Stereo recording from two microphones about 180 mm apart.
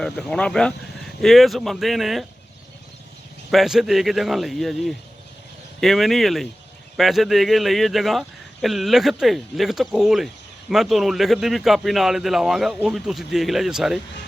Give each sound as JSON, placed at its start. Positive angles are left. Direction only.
{"t": 0.0, "sound": "a man's voice", "side_deg": 5}
{"t": 3.5, "sound": "a man's voice", "side_deg": 0}